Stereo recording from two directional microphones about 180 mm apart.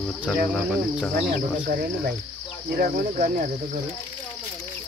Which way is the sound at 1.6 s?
55° right (ahead or behind).